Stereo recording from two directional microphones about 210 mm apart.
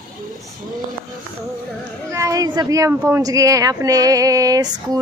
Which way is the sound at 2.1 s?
15° right (ahead or behind).